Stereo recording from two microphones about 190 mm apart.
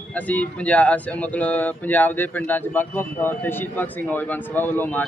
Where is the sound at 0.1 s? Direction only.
5° left (ahead or behind).